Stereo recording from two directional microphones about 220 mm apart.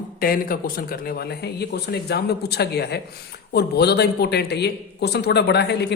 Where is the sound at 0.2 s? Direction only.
40° left (ahead or behind).